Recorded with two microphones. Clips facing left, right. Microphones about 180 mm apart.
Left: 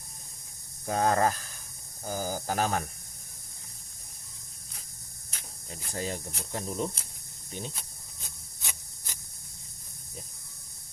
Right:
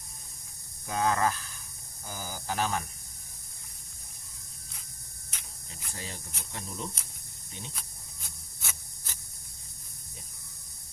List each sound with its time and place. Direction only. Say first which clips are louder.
0.9 s speech: left 2 dB; 40° left (ahead or behind)
5.3 s speech: left 6 dB; 35° left (ahead or behind)